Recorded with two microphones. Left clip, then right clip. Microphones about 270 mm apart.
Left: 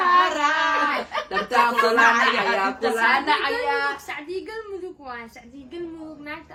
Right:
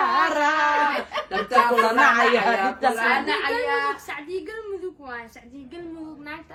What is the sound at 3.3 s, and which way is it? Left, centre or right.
A woman's voice, centre.